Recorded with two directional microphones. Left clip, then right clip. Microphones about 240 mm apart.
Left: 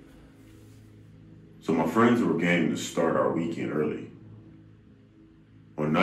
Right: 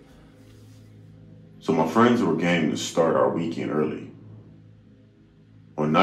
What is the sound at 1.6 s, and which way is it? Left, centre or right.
A man's voice, right.